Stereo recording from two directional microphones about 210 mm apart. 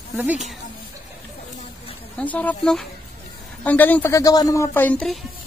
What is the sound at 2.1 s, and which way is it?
Speech, 5° left (ahead or behind).